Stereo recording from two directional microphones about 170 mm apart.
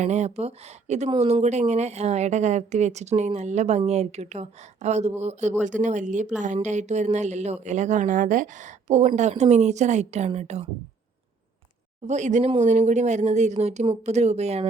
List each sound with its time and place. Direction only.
0.0 s a woman's voice: 45° right (ahead or behind)
12.0 s a woman's voice: 45° right (ahead or behind)